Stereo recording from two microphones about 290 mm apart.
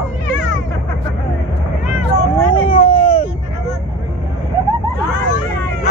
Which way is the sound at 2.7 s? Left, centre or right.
Centre.